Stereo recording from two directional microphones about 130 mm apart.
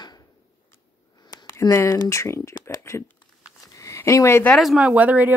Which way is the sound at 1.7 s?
20° left (ahead or behind).